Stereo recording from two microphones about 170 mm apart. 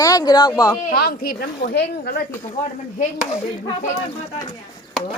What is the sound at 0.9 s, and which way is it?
Speech, 60° left (ahead or behind).